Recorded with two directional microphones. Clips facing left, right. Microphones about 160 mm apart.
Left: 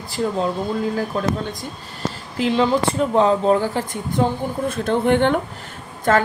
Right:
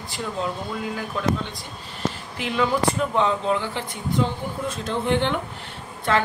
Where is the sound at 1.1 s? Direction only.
40° left (ahead or behind).